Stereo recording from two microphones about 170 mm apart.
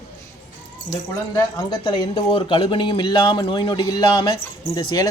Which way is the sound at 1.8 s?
30° left (ahead or behind).